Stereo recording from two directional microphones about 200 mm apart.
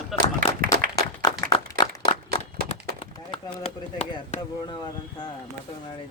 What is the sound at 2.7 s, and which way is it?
Chop, 25° left (ahead or behind).